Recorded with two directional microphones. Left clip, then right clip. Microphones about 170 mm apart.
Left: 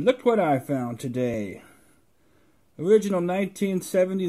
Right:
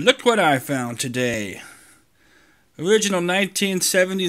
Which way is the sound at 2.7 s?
10° right (ahead or behind).